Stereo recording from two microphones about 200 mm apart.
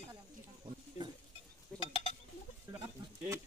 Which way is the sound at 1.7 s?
5° left (ahead or behind).